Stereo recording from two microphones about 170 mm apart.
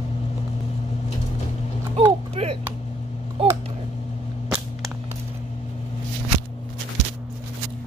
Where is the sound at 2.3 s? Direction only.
35° right (ahead or behind).